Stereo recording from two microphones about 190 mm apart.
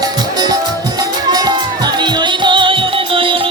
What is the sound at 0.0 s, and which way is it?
Music, 20° right (ahead or behind).